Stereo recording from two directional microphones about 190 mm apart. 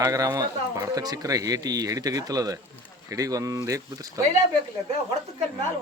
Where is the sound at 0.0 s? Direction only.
20° right (ahead or behind).